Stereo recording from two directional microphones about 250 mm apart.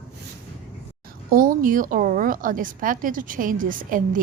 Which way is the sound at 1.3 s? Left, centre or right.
Right.